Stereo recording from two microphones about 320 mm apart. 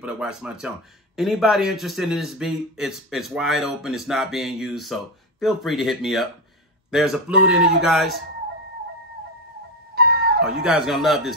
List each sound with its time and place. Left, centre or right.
0.0 s speech: centre
9.9 s music: right
10.4 s speech: centre